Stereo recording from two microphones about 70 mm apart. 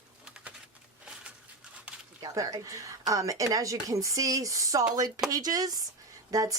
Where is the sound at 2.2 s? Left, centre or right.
Right.